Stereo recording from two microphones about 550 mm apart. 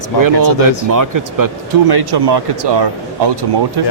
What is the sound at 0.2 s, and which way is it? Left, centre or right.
Speech, right.